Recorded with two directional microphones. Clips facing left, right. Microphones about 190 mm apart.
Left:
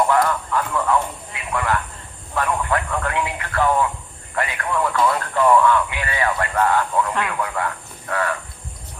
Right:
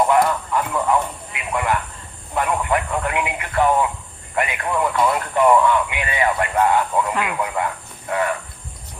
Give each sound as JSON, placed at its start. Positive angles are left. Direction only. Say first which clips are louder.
{"t": 0.1, "sound": "speech", "louder": "right 2 dB", "side_deg": -20}